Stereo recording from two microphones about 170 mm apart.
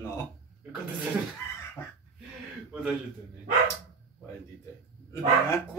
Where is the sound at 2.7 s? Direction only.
5° right (ahead or behind).